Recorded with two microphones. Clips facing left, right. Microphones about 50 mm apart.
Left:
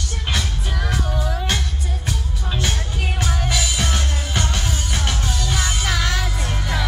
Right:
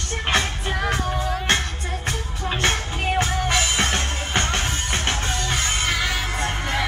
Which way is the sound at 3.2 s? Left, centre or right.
Right.